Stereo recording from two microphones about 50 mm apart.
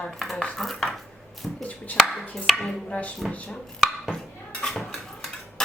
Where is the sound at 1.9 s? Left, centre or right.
Left.